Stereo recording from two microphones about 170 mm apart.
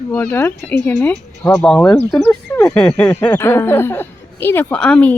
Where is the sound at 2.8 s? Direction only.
5° left (ahead or behind).